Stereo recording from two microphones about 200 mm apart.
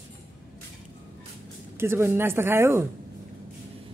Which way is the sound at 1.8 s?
10° right (ahead or behind).